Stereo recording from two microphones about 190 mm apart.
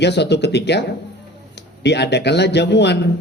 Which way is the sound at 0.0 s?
65° left (ahead or behind).